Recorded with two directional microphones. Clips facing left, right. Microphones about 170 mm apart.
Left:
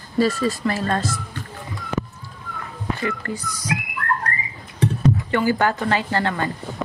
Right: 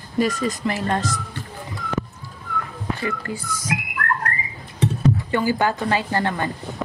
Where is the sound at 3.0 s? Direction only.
20° right (ahead or behind).